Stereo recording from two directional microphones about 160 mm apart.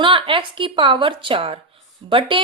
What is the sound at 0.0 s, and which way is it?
A woman's voice, 30° right (ahead or behind).